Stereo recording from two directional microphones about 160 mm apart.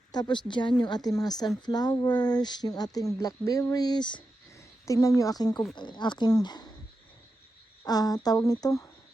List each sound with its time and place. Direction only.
0.1 s speech: 25° left (ahead or behind)
7.9 s speech: 25° left (ahead or behind)